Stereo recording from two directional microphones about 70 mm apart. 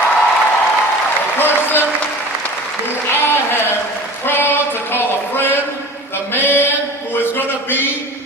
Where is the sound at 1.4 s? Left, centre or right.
Left.